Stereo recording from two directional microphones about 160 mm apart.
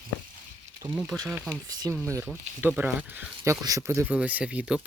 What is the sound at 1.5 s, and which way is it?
Speech, 25° right (ahead or behind).